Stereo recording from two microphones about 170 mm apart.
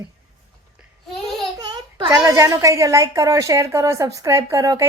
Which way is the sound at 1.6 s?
25° right (ahead or behind).